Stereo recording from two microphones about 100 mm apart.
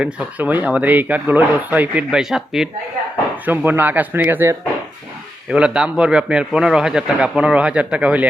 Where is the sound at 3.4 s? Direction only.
20° right (ahead or behind).